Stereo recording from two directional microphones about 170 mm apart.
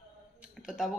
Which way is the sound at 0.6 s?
Centre (ahead or behind).